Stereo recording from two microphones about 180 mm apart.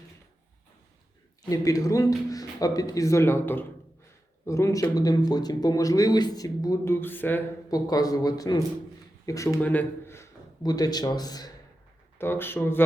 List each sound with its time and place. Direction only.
1.5 s a man's voice: 20° left (ahead or behind)